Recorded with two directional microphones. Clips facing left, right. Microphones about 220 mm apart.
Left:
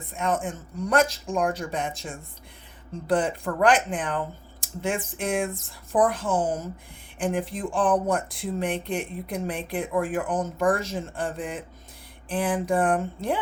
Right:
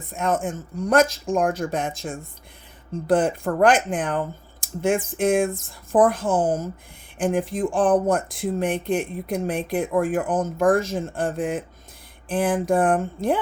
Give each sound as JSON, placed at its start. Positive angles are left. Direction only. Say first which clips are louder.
{"t": 0.1, "sound": "speech", "louder": "right 3 dB", "side_deg": -45}